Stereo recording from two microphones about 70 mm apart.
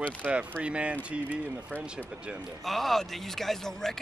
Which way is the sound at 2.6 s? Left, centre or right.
Centre.